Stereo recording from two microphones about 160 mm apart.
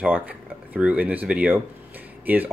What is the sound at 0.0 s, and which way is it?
Speech, 10° right (ahead or behind).